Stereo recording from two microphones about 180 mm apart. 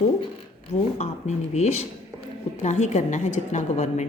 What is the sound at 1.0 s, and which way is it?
A woman's voice, 40° left (ahead or behind).